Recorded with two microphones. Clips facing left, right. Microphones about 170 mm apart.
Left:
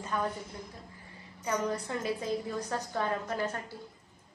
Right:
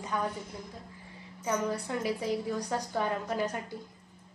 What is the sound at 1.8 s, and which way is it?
A woman's voice, 15° right (ahead or behind).